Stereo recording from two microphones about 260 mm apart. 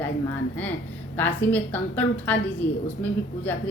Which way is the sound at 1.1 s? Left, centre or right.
Centre.